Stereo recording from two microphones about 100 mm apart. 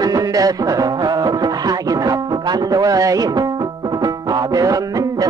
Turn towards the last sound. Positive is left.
turn(degrees=-40)  # may be behind; listen again after turning